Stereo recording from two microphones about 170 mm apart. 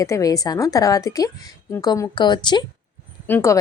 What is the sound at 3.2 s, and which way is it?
Speech, 15° left (ahead or behind).